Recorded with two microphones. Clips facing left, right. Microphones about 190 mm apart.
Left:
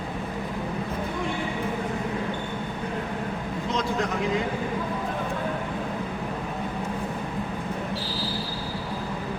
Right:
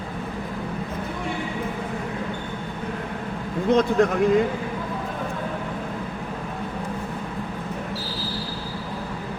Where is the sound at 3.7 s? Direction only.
55° right (ahead or behind).